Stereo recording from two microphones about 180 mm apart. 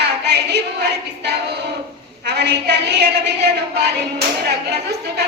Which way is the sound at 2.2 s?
70° right (ahead or behind).